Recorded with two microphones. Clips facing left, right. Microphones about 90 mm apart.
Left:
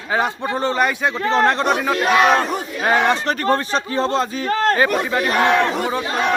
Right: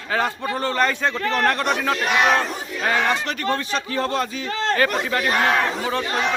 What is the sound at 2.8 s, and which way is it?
A man's voice, 25° left (ahead or behind).